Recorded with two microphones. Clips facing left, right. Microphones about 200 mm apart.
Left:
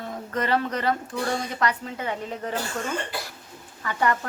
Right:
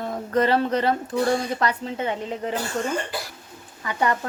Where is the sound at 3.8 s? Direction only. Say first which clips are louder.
Right 1 dB; 20° right (ahead or behind).